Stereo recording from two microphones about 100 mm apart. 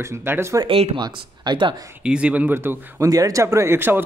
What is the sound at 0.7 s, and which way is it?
Speech, 70° right (ahead or behind).